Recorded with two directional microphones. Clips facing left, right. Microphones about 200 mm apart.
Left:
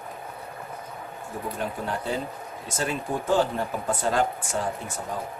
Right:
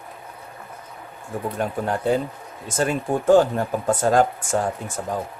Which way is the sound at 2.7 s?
50° right (ahead or behind).